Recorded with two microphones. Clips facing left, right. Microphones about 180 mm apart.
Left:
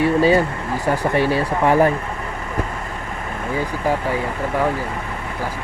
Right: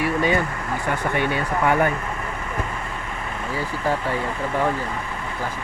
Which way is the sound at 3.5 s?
15° left (ahead or behind).